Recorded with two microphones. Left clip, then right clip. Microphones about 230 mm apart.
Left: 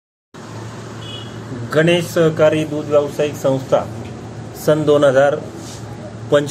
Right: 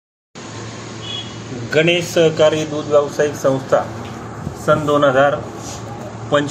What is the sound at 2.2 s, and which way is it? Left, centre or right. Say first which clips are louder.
Speech: right 1 dB; left.